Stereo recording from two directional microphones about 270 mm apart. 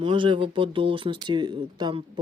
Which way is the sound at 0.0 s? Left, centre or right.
Centre.